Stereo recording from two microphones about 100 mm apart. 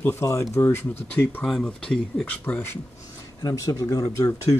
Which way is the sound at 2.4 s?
15° left (ahead or behind).